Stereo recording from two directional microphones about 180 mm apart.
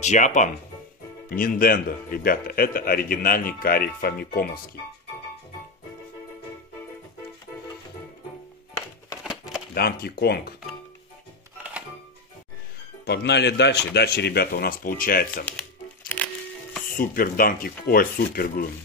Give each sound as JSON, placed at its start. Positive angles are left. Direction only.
{"t": 0.0, "sound": "a man's voice", "side_deg": 40}
{"t": 9.2, "sound": "a sound", "side_deg": 0}
{"t": 9.8, "sound": "speech", "side_deg": 60}
{"t": 13.0, "sound": "speech", "side_deg": 65}
{"t": 16.9, "sound": "a man's voice", "side_deg": 50}